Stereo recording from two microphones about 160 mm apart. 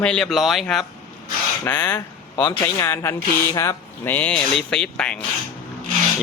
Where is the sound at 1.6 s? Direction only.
10° left (ahead or behind).